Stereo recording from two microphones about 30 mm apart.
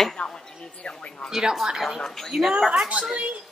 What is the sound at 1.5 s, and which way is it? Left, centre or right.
A woman's voice, centre.